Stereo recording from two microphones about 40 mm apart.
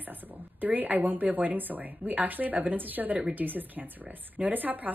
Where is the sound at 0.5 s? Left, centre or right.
Right.